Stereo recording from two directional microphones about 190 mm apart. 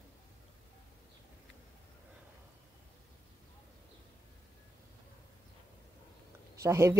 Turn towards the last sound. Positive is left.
turn(degrees=-15)  # may be behind; listen again after turning